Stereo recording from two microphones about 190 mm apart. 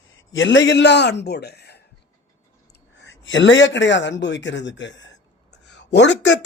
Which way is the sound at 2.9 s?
70° left (ahead or behind).